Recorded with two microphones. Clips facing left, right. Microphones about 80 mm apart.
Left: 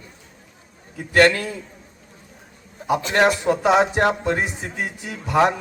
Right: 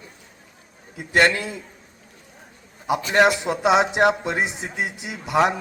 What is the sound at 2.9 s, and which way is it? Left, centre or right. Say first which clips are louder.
A man's voice: even; centre.